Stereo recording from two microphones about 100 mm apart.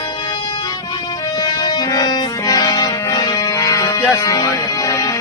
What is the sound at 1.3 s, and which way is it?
Music, 45° left (ahead or behind).